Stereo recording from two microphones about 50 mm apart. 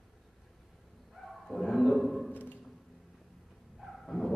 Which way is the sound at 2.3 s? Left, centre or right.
Left.